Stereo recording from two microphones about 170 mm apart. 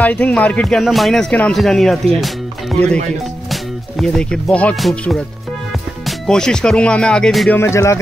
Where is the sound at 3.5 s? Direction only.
Centre (ahead or behind).